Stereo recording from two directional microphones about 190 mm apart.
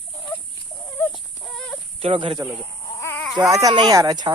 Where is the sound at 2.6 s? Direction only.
15° left (ahead or behind).